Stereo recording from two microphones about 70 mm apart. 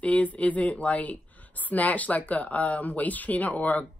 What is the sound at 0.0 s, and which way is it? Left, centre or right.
A woman's voice, left.